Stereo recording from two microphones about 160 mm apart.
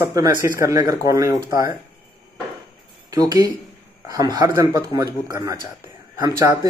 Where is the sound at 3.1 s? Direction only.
20° right (ahead or behind).